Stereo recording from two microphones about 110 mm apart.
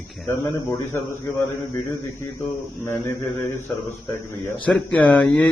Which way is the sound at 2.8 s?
20° left (ahead or behind).